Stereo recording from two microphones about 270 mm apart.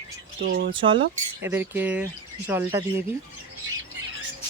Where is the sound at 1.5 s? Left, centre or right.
Centre.